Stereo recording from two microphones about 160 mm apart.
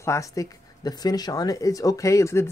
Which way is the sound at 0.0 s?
20° left (ahead or behind).